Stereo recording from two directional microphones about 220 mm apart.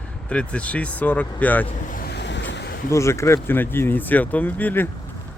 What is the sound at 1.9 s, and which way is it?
Waves, 45° left (ahead or behind).